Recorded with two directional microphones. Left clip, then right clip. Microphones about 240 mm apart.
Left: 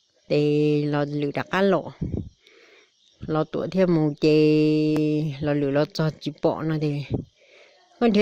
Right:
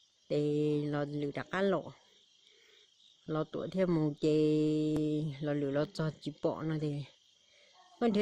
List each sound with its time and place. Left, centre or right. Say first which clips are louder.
0.3 s speech: left 11 dB; left
3.2 s speech: left 11 dB; left